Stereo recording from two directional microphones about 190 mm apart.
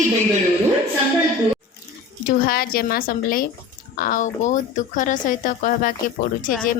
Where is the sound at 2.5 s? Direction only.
50° left (ahead or behind).